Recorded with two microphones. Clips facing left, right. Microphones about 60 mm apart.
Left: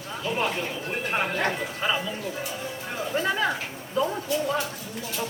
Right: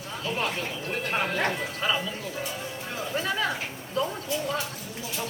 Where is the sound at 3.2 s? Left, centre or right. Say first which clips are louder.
Left 3 dB; centre.